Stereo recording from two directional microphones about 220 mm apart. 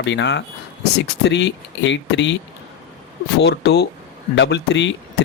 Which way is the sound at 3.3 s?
50° left (ahead or behind).